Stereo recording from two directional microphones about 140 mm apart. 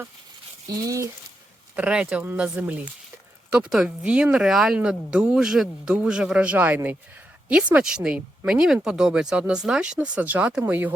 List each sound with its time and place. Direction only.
0.7 s speech: 20° right (ahead or behind)
1.7 s speech: 10° right (ahead or behind)